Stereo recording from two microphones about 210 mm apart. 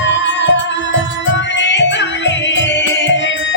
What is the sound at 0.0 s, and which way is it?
Music, 60° left (ahead or behind).